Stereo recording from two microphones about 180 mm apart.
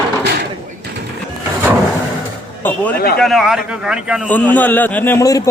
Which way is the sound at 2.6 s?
10° left (ahead or behind).